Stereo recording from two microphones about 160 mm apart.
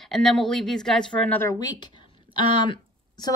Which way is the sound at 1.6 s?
25° left (ahead or behind).